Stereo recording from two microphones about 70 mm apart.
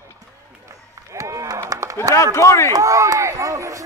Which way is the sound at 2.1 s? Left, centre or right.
Left.